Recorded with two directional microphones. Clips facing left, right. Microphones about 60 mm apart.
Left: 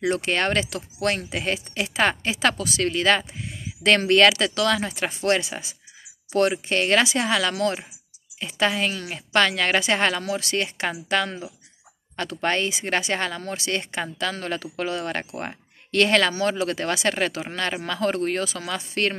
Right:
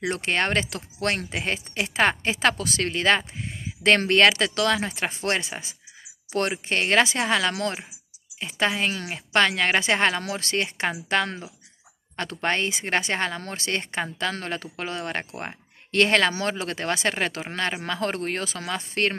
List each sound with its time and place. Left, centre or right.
0.0 s speech: right
1.3 s speech: right
2.3 s speech: right
10.2 s speech: right